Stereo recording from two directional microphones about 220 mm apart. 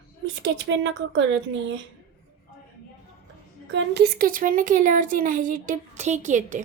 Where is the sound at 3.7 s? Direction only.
50° right (ahead or behind); by 6.6 s 35° right (ahead or behind).